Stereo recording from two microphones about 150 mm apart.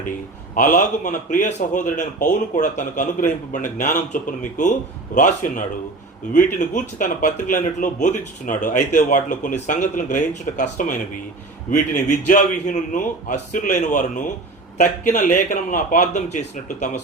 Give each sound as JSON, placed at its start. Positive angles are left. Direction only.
{"t": 0.5, "sound": "speech", "side_deg": 60}